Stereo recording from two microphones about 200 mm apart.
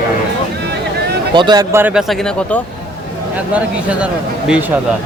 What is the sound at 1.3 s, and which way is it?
Speech, 20° right (ahead or behind).